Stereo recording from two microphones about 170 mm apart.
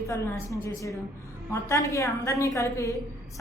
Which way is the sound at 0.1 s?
20° left (ahead or behind).